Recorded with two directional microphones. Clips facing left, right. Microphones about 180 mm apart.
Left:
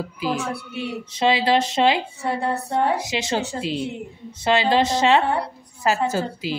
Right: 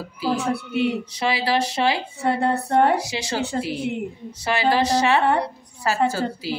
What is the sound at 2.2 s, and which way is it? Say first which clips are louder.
Speech: right 4 dB; 60° right (ahead or behind).